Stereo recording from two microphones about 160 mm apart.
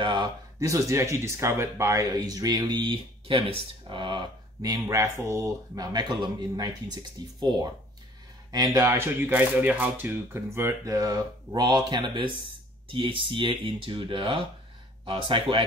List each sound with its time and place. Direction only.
0.0 s speech: 30° right (ahead or behind)